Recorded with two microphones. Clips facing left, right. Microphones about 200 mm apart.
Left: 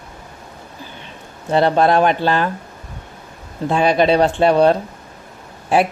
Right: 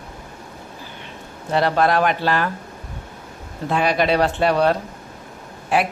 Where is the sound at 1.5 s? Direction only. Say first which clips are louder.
Left 4 dB; 25° left (ahead or behind).